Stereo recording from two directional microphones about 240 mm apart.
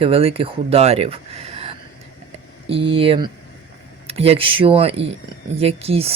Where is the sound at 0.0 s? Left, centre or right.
Right.